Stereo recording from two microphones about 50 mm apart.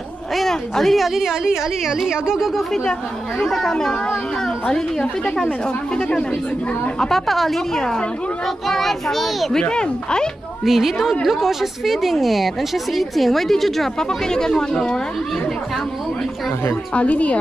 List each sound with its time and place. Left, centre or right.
0.4 s a woman's voice: centre
2.5 s a woman's voice: centre
4.6 s speech: centre
7.0 s a woman's voice: centre
9.6 s speech: centre
10.6 s a woman's voice: centre
16.9 s a woman's voice: left